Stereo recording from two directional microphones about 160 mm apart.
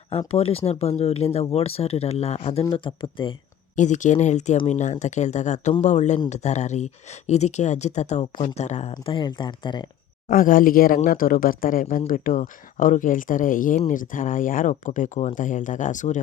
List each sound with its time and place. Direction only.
0.3 s speech: 35° left (ahead or behind)
2.6 s speech: 30° left (ahead or behind)
3.8 s speech: 50° left (ahead or behind)
8.2 s speech: 30° left (ahead or behind)
8.5 s speech: 45° left (ahead or behind)
8.9 s speech: 30° left (ahead or behind)
10.2 s speech: 60° left (ahead or behind)